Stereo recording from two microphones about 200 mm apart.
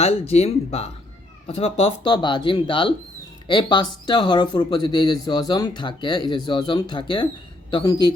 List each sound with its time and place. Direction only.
0.0 s speech: 30° left (ahead or behind)